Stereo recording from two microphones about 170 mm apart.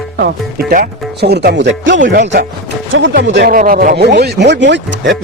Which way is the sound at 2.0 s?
70° right (ahead or behind).